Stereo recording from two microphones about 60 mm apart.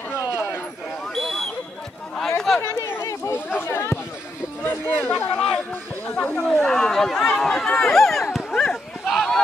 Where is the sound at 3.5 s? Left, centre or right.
Left.